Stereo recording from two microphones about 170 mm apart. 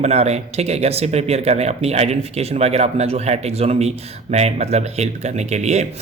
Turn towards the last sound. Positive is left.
turn(degrees=-40)  # may be behind; listen again after turning